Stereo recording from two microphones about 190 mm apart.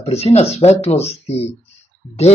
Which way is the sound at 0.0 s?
35° left (ahead or behind).